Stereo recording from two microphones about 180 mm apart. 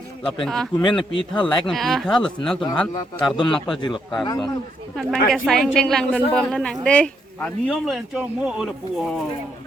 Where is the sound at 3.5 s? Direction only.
Centre (ahead or behind).